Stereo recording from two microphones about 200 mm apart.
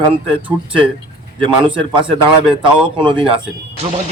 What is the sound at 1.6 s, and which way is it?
Speech, 25° right (ahead or behind).